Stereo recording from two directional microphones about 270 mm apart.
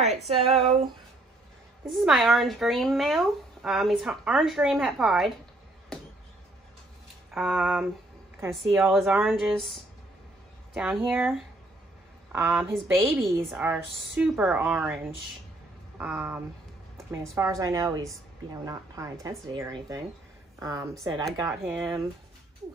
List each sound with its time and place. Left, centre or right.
0.6 s a sound: right
1.9 s speech: centre
7.3 s a woman's voice: centre
17.4 s a woman's voice: centre